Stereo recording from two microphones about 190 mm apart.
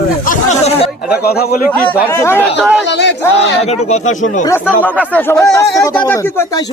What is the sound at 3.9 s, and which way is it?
Speech, 40° left (ahead or behind).